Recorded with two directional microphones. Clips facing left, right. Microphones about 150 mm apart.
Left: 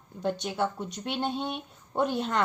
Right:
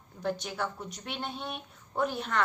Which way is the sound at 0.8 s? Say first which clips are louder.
Left 6 dB; centre (ahead or behind).